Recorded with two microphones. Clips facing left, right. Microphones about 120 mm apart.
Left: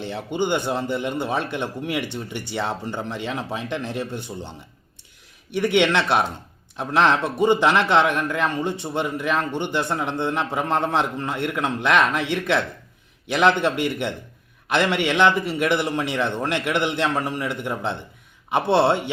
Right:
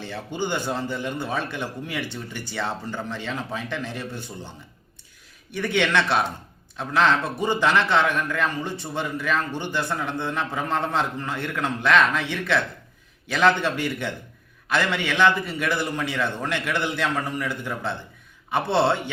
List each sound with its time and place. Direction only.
0.3 s a man's voice: 15° left (ahead or behind)
5.5 s a man's voice: 20° left (ahead or behind)
13.3 s a man's voice: 15° left (ahead or behind)